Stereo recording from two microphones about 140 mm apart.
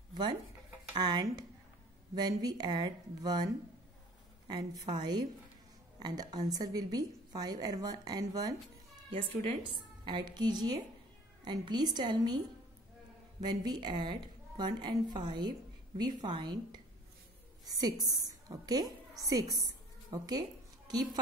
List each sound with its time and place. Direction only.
0.9 s a woman's voice: 30° right (ahead or behind)
4.5 s a woman's voice: 30° right (ahead or behind)
9.6 s speech: 35° right (ahead or behind)
13.4 s a woman's voice: 30° right (ahead or behind)
19.6 s a sound: 30° right (ahead or behind)